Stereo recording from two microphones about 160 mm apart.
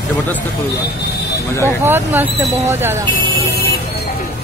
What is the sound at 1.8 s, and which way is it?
Speech, 15° right (ahead or behind).